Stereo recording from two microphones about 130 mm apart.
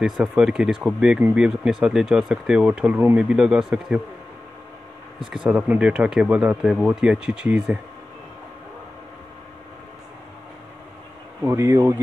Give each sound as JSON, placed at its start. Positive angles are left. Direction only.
{"t": 0.0, "sound": "speech", "side_deg": -5}
{"t": 5.2, "sound": "speech", "side_deg": -5}
{"t": 11.4, "sound": "speech", "side_deg": -20}